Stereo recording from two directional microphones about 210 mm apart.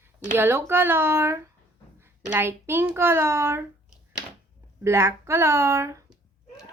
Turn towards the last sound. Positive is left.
turn(degrees=-15)  # may be behind; listen again after turning